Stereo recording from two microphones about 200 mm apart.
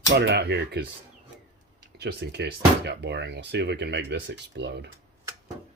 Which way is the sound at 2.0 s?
55° right (ahead or behind).